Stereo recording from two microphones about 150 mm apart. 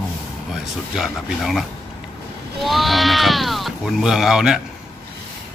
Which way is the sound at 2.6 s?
Centre (ahead or behind).